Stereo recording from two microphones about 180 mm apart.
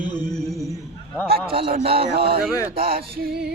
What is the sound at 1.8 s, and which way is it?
Speech, 30° right (ahead or behind).